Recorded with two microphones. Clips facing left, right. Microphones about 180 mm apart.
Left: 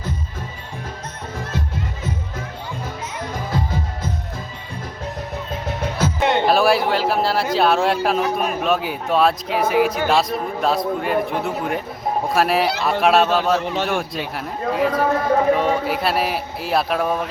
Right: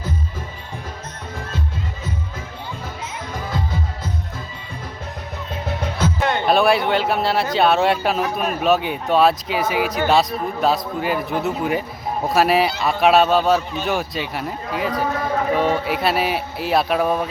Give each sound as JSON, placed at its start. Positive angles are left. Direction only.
{"t": 6.1, "sound": "music", "side_deg": 20}
{"t": 6.5, "sound": "a man's voice", "side_deg": 0}